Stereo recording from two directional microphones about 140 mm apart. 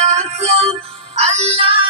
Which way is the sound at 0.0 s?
55° right (ahead or behind).